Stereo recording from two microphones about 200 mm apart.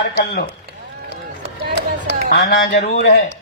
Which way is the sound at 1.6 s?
60° right (ahead or behind).